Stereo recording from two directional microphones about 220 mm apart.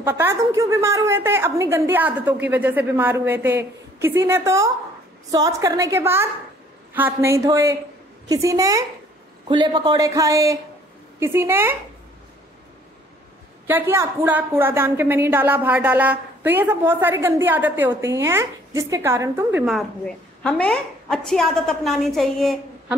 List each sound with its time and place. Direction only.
0.0 s a woman's voice: 10° right (ahead or behind)
13.7 s a woman's voice: 10° right (ahead or behind)
20.4 s a woman's voice: 5° left (ahead or behind)